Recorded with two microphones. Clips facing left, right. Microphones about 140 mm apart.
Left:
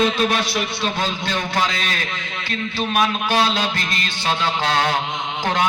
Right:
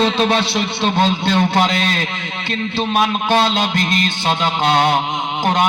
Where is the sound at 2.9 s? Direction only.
25° right (ahead or behind).